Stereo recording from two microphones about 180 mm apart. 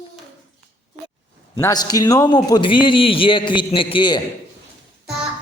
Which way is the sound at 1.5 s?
20° left (ahead or behind).